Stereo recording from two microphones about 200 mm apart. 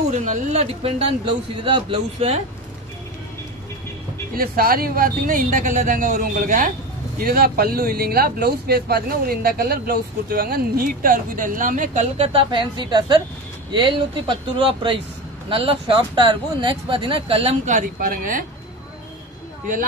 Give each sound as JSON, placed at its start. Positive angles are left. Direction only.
{"t": 0.1, "sound": "speech", "side_deg": -35}
{"t": 4.4, "sound": "speech", "side_deg": -45}
{"t": 15.5, "sound": "speech", "side_deg": -25}